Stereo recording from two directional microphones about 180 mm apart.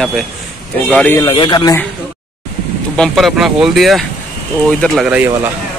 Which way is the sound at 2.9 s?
Centre (ahead or behind).